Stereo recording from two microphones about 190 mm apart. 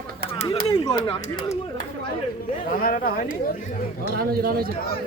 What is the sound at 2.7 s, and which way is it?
Speech, 50° left (ahead or behind).